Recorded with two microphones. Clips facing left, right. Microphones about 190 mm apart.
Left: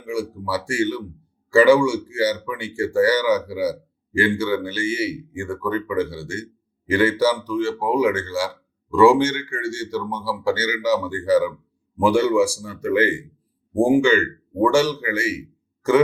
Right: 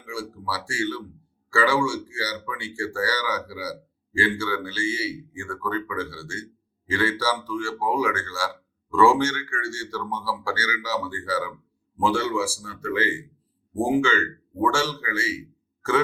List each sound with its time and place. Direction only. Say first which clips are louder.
0.0 s a man's voice: left 7 dB; 15° left (ahead or behind)